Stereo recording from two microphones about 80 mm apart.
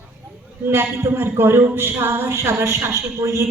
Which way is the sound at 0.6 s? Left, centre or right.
Right.